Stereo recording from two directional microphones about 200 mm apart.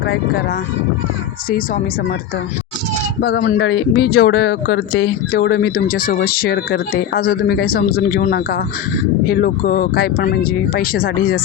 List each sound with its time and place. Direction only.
1.5 s speech: 45° left (ahead or behind)
3.2 s speech: 55° left (ahead or behind)